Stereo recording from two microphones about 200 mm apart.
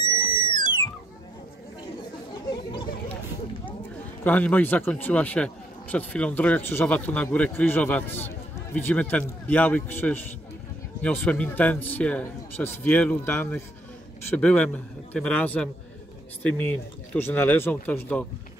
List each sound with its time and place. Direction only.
0.2 s a sound: 25° left (ahead or behind)
2.5 s chatter: 20° left (ahead or behind)
4.2 s speech: 10° left (ahead or behind)